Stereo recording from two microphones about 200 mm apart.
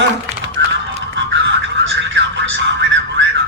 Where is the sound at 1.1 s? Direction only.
65° right (ahead or behind).